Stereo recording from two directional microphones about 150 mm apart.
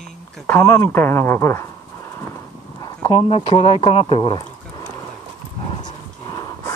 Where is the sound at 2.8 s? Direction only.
25° left (ahead or behind).